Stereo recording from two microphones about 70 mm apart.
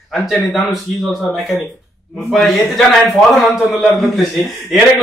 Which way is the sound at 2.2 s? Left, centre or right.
Centre.